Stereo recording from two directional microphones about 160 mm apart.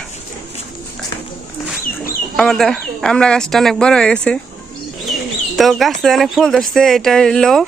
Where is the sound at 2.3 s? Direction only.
5° left (ahead or behind).